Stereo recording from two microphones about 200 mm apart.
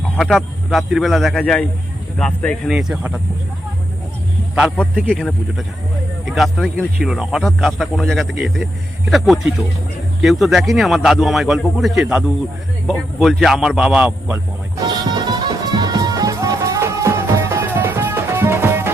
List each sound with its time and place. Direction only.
0.2 s speech: centre (ahead or behind)
4.8 s speech: 5° left (ahead or behind)
14.8 s music: 20° right (ahead or behind)